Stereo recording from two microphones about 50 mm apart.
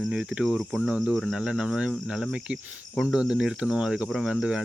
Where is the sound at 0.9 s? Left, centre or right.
Right.